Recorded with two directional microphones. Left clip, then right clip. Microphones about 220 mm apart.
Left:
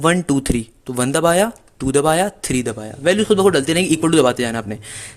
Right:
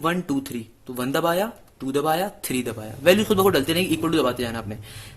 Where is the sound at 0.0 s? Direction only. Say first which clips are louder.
Left 8 dB; 30° left (ahead or behind).